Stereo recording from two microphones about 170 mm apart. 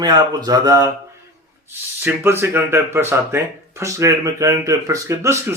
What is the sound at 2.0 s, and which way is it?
Speech, 15° right (ahead or behind).